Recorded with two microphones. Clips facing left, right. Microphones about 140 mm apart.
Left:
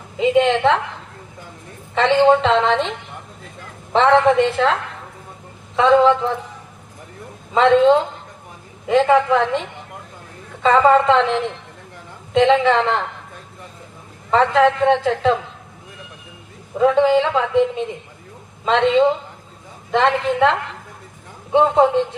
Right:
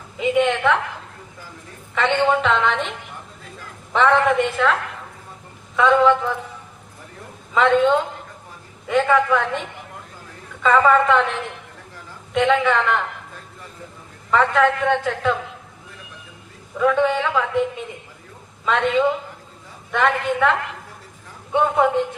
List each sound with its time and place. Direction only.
0.2 s a woman's voice: 25° left (ahead or behind)
2.1 s a woman's voice: 25° left (ahead or behind)
3.9 s a woman's voice: 25° left (ahead or behind)
7.5 s a woman's voice: 30° left (ahead or behind)
14.3 s a woman's voice: 25° left (ahead or behind)
16.7 s a woman's voice: 30° left (ahead or behind)